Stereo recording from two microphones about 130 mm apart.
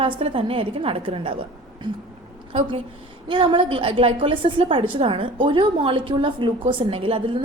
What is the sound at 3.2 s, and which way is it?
A woman's voice, 40° right (ahead or behind).